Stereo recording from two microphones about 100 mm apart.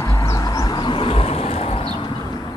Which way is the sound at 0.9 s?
65° left (ahead or behind).